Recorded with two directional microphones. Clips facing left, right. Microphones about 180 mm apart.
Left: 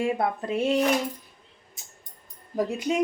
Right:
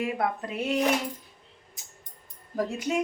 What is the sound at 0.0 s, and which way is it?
Speech, 30° left (ahead or behind).